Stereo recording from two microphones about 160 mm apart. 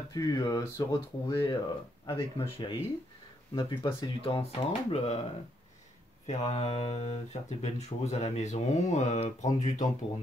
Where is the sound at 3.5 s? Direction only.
30° left (ahead or behind).